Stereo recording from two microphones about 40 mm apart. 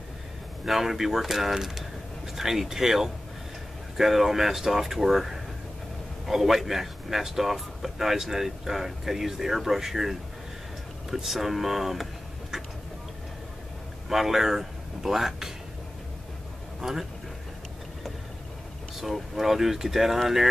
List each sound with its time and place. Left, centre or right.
0.7 s speech: centre
14.0 s speech: centre
16.8 s speech: centre
18.9 s speech: centre